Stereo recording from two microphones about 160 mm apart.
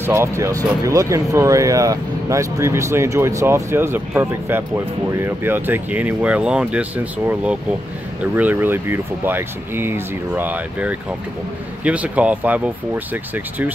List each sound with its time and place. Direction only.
0.0 s speech: 15° right (ahead or behind)